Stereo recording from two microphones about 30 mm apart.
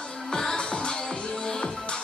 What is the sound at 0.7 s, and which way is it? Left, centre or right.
Music, left.